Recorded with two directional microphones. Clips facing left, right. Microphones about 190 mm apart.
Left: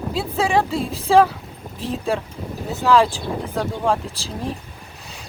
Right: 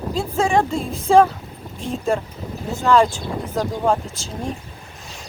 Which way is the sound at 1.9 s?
Centre (ahead or behind).